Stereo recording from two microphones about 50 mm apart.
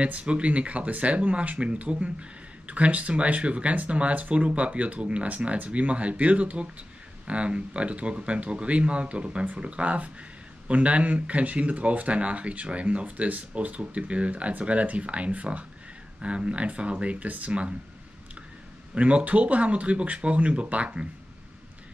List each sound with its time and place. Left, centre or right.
0.0 s speech: right
18.9 s speech: right